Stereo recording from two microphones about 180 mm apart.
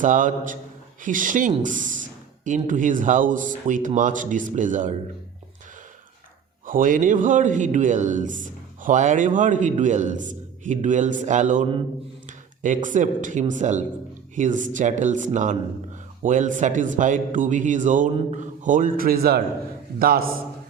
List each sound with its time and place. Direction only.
0.0 s a man's voice: 45° right (ahead or behind)
6.7 s a man's voice: 50° right (ahead or behind)
12.6 s a man's voice: 45° right (ahead or behind)